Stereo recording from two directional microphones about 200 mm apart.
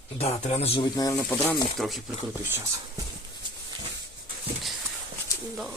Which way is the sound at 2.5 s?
15° right (ahead or behind).